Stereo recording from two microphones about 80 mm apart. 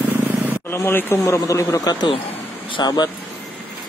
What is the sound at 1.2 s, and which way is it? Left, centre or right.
Speech, left.